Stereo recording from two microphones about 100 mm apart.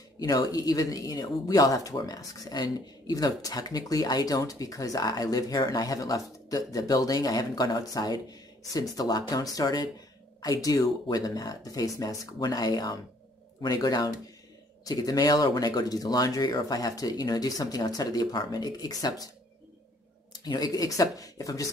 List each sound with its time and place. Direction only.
0.2 s speech: 40° left (ahead or behind)
20.3 s speech: 40° left (ahead or behind)